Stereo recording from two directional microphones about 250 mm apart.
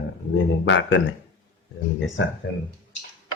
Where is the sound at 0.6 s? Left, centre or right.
Left.